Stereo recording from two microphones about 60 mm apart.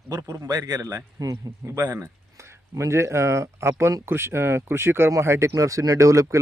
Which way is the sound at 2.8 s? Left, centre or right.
Right.